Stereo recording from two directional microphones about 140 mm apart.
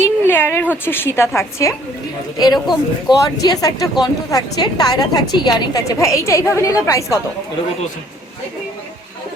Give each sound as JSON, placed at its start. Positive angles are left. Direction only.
{"t": 0.0, "sound": "a woman's voice", "side_deg": 15}
{"t": 3.1, "sound": "a woman's voice", "side_deg": 30}